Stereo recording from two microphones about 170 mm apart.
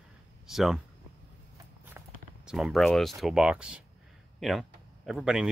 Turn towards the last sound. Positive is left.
turn(degrees=0)  # may be behind; listen again after turning